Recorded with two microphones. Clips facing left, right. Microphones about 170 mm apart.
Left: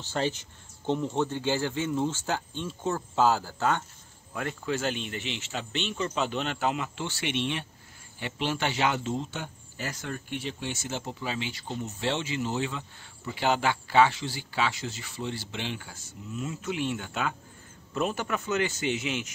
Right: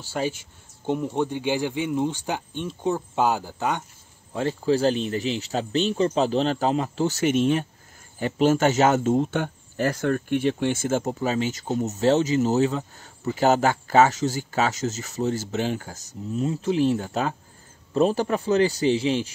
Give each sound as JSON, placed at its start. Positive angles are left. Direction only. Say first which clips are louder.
{"t": 0.0, "sound": "speech", "louder": "right 2 dB", "side_deg": -10}
{"t": 4.3, "sound": "speech", "louder": "right 9 dB", "side_deg": -30}